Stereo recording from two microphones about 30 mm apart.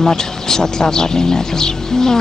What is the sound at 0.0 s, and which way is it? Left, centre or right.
Speech, centre.